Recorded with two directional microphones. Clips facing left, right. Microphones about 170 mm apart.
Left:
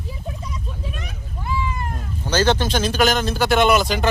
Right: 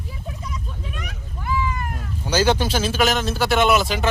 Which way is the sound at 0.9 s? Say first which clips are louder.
Left 1 dB; 25° left (ahead or behind).